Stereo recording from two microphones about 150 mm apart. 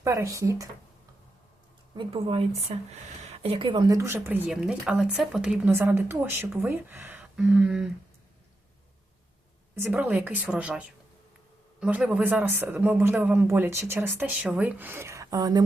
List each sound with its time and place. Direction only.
0.0 s speech: 20° right (ahead or behind)
2.0 s speech: 35° right (ahead or behind)
3.8 s speech: 20° right (ahead or behind); by 7.9 s 5° right (ahead or behind)
9.7 s speech: 15° right (ahead or behind)